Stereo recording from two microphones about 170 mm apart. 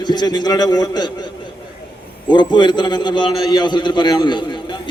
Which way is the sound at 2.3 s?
25° left (ahead or behind).